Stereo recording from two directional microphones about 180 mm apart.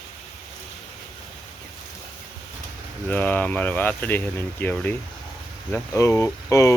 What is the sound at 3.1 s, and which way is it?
Speech, 10° left (ahead or behind).